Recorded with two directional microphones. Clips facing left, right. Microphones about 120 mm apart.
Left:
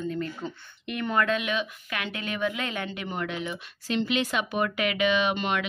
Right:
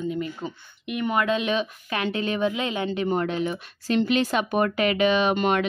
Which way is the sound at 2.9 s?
35° right (ahead or behind).